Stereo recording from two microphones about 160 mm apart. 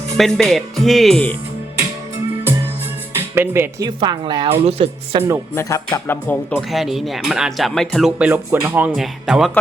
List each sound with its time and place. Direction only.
0.2 s speech: centre (ahead or behind)
3.2 s speech: 15° right (ahead or behind)
3.8 s speech: 25° right (ahead or behind)
4.5 s speech: 35° right (ahead or behind)
5.5 s speech: 20° left (ahead or behind); by 8.9 s 15° right (ahead or behind)
9.0 s speech: 5° right (ahead or behind)